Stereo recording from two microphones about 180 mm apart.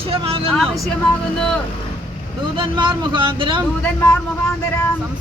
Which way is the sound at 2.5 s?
25° right (ahead or behind).